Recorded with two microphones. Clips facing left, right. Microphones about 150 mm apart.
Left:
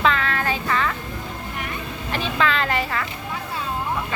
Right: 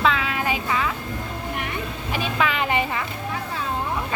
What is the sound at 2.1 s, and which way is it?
Speech, 10° right (ahead or behind).